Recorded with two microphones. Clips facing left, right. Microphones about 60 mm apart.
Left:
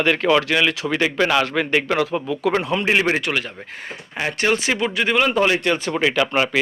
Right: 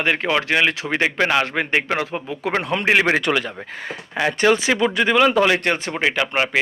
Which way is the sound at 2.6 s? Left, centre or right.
Right.